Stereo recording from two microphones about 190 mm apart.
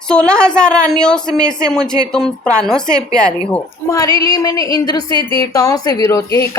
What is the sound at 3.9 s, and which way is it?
A woman's voice, 20° left (ahead or behind).